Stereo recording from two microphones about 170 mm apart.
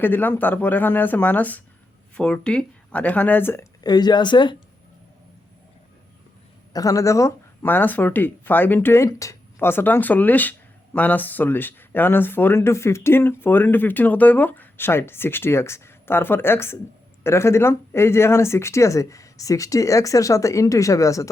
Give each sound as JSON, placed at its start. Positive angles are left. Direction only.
{"t": 0.0, "sound": "speech", "side_deg": 10}
{"t": 6.7, "sound": "speech", "side_deg": 20}